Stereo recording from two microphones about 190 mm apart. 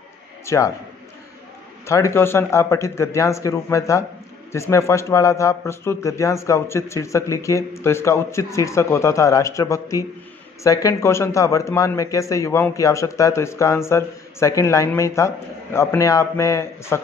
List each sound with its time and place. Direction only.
0.5 s a man's voice: 15° left (ahead or behind)
1.9 s a man's voice: 15° left (ahead or behind)